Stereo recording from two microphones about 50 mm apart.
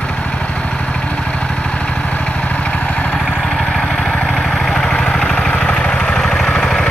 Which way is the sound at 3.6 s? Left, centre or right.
Centre.